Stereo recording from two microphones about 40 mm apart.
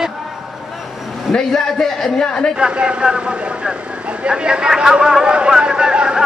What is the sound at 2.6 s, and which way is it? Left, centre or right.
Speech, right.